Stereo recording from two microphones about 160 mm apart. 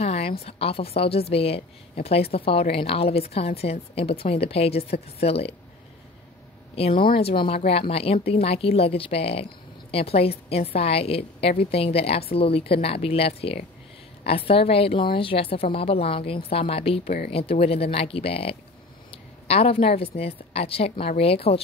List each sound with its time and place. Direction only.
0.0 s a sound: 40° left (ahead or behind)
0.4 s a woman's voice: 35° left (ahead or behind)
6.7 s a woman's voice: 40° left (ahead or behind)